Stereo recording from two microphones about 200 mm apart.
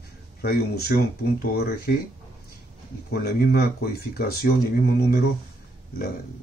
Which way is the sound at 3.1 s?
50° left (ahead or behind).